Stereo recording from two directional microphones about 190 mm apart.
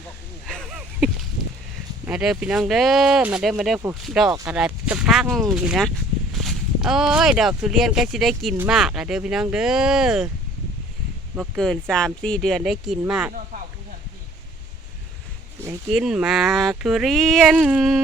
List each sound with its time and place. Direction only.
0.4 s a sound: centre (ahead or behind)
2.0 s speech: 5° right (ahead or behind)
11.3 s speech: centre (ahead or behind)
15.9 s speech: 5° right (ahead or behind)